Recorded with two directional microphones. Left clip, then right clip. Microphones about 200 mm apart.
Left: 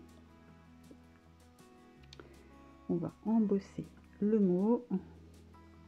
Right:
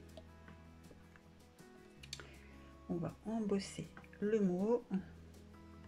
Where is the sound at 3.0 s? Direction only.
25° left (ahead or behind).